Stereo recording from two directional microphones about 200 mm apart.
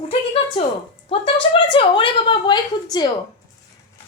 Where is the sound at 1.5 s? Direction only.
25° left (ahead or behind).